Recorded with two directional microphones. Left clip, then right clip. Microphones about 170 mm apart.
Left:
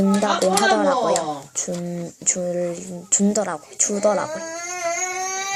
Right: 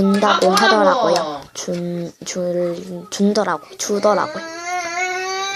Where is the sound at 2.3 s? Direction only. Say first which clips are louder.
Right 2 dB; centre (ahead or behind).